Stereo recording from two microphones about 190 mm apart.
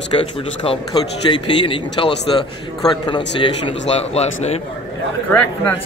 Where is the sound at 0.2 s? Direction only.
25° left (ahead or behind).